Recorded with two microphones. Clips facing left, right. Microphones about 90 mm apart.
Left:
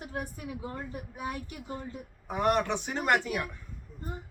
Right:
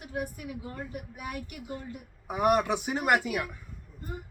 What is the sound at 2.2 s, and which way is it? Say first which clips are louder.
A man's voice: right 2 dB; 10° right (ahead or behind).